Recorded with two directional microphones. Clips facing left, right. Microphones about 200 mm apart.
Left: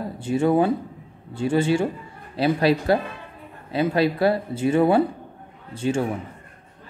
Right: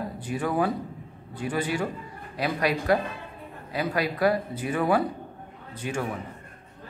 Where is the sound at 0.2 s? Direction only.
25° left (ahead or behind).